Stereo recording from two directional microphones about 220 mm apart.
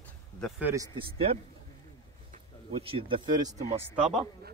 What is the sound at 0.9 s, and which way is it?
Speech, 25° right (ahead or behind).